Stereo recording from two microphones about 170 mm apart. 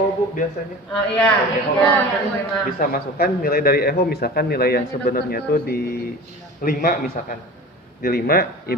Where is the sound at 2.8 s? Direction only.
60° left (ahead or behind).